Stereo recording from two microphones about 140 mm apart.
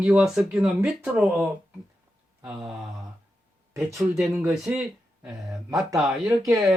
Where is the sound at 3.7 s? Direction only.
Centre (ahead or behind).